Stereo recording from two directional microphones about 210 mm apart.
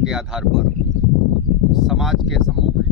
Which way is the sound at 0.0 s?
5° right (ahead or behind).